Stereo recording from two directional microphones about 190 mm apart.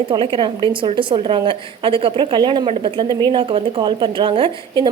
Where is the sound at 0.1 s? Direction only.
25° right (ahead or behind).